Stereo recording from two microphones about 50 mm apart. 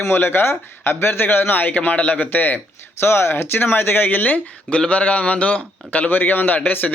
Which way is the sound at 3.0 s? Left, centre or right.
Left.